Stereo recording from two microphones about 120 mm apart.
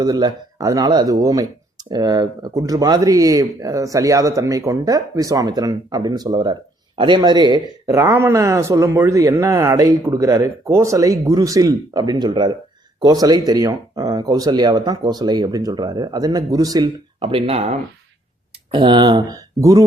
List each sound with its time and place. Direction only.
0.0 s speech: 30° right (ahead or behind)
17.2 s speech: 50° right (ahead or behind)
18.7 s speech: 40° right (ahead or behind)